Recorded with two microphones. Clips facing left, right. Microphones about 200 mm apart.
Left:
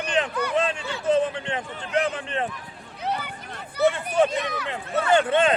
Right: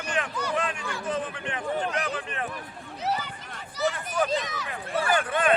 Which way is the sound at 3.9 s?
25° left (ahead or behind).